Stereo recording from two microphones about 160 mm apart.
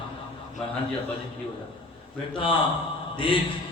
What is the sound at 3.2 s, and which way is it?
Speech, 35° left (ahead or behind).